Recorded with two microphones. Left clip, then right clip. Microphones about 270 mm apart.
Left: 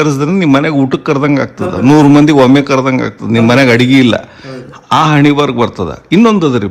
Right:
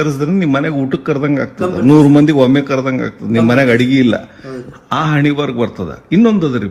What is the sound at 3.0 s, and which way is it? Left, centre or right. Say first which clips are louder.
Speech: left 3 dB; right.